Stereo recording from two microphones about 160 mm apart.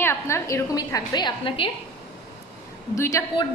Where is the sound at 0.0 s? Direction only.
15° left (ahead or behind).